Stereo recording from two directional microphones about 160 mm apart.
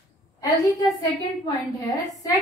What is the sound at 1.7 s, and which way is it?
Speech, 20° left (ahead or behind).